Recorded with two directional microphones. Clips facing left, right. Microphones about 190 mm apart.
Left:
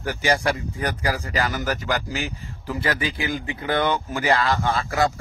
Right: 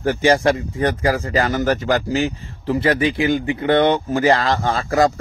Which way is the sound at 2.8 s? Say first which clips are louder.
Right 8 dB; 25° right (ahead or behind).